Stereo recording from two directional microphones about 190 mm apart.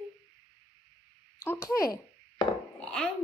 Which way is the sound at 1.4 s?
15° left (ahead or behind).